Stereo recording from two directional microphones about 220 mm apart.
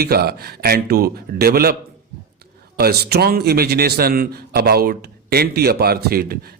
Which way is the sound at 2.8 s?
45° right (ahead or behind).